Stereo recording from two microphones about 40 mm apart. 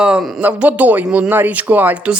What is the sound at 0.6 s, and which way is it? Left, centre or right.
Speech, right.